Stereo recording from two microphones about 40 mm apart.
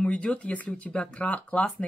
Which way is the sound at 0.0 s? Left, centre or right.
Left.